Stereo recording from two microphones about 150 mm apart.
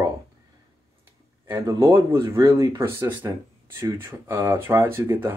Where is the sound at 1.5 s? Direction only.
15° right (ahead or behind).